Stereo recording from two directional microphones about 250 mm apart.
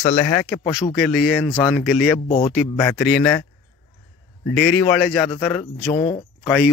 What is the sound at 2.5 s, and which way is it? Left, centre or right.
Speech, centre.